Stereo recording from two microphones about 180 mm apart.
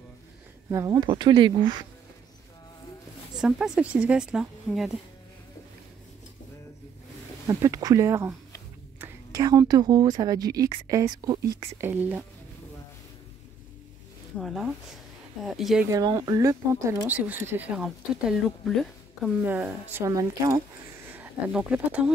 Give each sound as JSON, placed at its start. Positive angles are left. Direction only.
{"t": 0.7, "sound": "speech", "side_deg": -20}
{"t": 3.3, "sound": "a woman's voice", "side_deg": -5}
{"t": 7.4, "sound": "a woman's voice", "side_deg": -20}
{"t": 14.4, "sound": "a woman's voice", "side_deg": 0}
{"t": 15.9, "sound": "a woman's voice", "side_deg": -20}
{"t": 21.1, "sound": "speech", "side_deg": -10}